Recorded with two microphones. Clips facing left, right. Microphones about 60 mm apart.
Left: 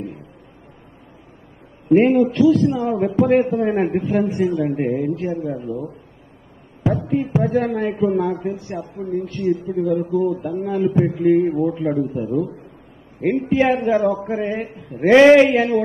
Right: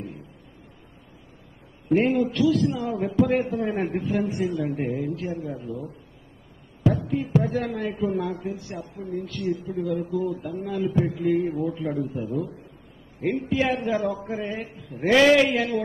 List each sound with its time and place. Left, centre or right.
2.1 s a man's voice: left
7.0 s a man's voice: left